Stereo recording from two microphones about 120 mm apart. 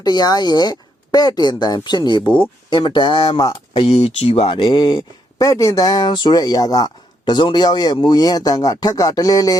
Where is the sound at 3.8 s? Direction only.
60° left (ahead or behind).